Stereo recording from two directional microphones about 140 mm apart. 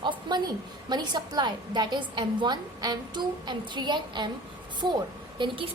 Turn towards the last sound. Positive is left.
turn(degrees=-40)  # may be behind; listen again after turning